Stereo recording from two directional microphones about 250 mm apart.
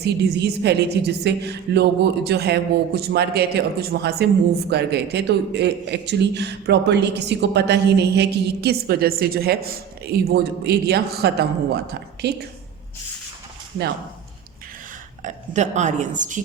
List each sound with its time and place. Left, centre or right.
0.0 s a woman's voice: right
15.2 s a woman's voice: right